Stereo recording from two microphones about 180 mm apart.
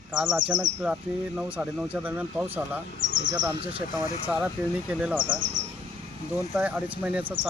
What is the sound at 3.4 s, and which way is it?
Speech, 25° right (ahead or behind).